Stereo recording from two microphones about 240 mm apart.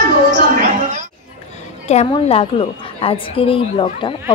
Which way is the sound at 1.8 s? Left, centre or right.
Left.